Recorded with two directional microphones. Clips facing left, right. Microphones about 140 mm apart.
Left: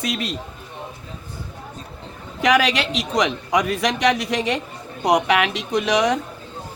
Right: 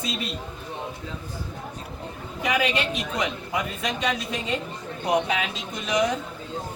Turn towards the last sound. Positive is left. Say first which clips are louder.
# left 6 dB
turn(degrees=75)  # may be behind; listen again after turning